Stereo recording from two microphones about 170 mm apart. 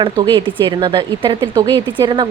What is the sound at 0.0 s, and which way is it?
A woman's voice, 30° right (ahead or behind).